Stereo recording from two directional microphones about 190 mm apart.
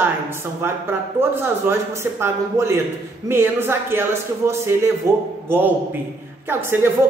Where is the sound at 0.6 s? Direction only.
10° right (ahead or behind).